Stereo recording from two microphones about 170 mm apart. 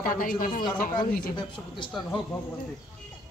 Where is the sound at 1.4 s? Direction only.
30° left (ahead or behind).